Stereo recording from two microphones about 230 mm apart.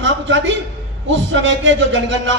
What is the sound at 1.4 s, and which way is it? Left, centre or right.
Speech, right.